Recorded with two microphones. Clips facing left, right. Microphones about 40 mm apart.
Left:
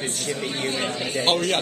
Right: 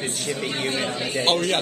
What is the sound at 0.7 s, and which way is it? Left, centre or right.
Speech, right.